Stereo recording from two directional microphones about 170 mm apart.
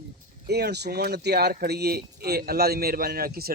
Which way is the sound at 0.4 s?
75° right (ahead or behind).